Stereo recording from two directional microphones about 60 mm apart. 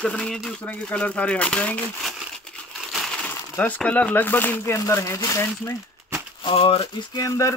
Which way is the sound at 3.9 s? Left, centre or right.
Left.